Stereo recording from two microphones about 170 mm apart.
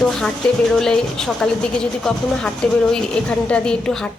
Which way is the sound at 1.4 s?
5° left (ahead or behind).